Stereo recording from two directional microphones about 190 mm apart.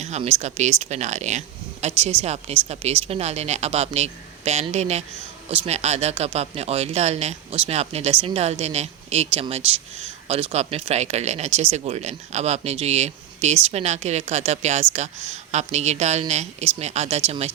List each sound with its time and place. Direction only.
0.0 s speech: 35° right (ahead or behind)